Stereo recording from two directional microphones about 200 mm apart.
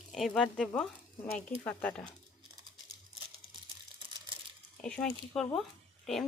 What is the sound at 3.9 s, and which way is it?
Crumpling, 20° right (ahead or behind).